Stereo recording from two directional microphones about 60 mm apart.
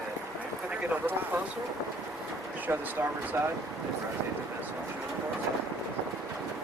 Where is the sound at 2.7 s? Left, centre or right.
Right.